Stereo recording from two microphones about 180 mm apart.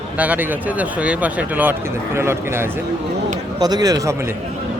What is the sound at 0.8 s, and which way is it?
A man's voice, 5° right (ahead or behind).